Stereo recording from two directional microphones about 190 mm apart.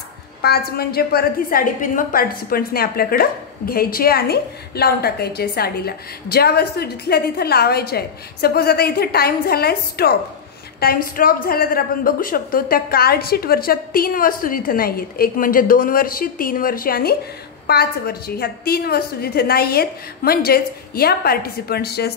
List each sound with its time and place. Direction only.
0.4 s a woman's voice: 55° left (ahead or behind)